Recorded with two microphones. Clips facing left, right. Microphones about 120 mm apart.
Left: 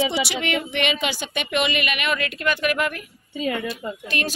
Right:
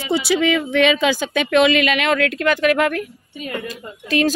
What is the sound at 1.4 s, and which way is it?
A woman's voice, 90° right.